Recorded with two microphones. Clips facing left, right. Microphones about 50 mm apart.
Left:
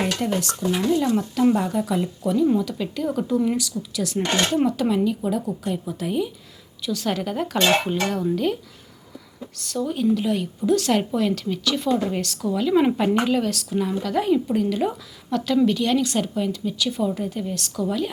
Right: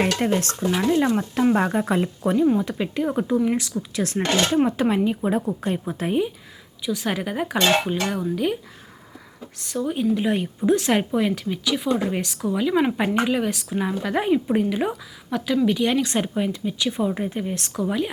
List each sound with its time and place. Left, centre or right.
0.0 s stir: right
0.9 s speech: right
1.5 s a woman's voice: right
6.8 s speech: centre
9.6 s speech: centre
10.2 s a woman's voice: right